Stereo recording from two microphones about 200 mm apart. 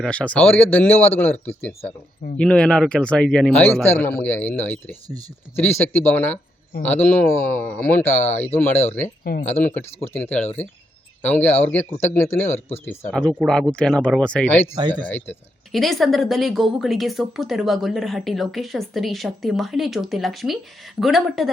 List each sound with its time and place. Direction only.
0.0 s speech: 5° left (ahead or behind)
9.2 s speech: 50° left (ahead or behind)
9.5 s speech: 10° left (ahead or behind)